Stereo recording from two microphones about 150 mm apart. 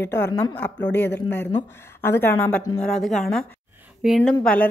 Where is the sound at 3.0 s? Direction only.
Centre (ahead or behind).